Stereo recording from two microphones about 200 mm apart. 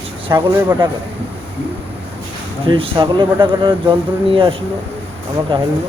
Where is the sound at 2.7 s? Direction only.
25° right (ahead or behind).